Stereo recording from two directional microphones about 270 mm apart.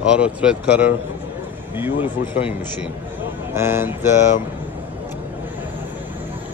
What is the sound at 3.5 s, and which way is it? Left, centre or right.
Speech, centre.